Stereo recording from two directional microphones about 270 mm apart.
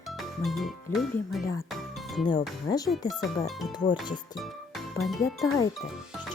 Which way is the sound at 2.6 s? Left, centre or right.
Centre.